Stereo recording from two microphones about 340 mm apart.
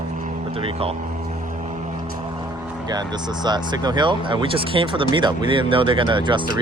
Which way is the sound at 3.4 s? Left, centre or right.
Centre.